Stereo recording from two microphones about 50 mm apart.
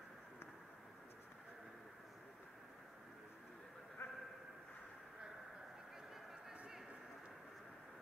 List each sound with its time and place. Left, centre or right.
4.0 s vehicle: left